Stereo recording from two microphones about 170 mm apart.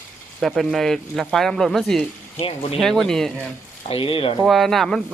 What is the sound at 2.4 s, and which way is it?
Speech, 35° left (ahead or behind).